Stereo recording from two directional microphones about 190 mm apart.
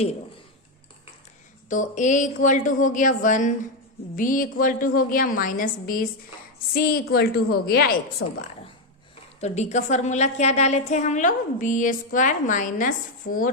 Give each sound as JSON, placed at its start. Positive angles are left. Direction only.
{"t": 1.7, "sound": "a woman's voice", "side_deg": 40}
{"t": 8.2, "sound": "a woman's voice", "side_deg": 90}
{"t": 9.4, "sound": "a woman's voice", "side_deg": 35}